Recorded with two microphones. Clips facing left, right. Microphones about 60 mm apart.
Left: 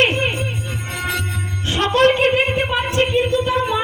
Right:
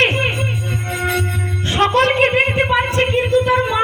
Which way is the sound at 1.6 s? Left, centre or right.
Right.